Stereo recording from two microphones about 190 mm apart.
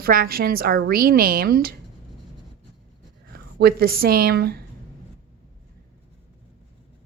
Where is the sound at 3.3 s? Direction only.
55° right (ahead or behind).